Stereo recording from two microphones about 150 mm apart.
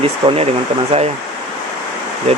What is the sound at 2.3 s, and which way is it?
Speech, 45° right (ahead or behind).